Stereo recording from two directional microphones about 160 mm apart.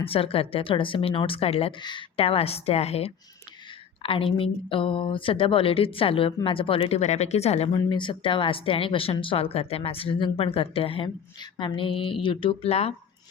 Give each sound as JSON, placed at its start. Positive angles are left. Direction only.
{"t": 0.1, "sound": "speech", "side_deg": 35}
{"t": 7.8, "sound": "speech", "side_deg": 30}